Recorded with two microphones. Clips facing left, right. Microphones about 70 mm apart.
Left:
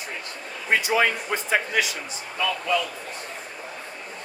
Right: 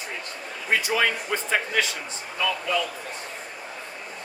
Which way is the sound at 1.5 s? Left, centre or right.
Centre.